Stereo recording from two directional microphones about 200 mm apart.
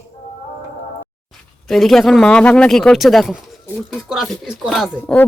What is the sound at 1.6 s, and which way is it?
Speech, centre (ahead or behind).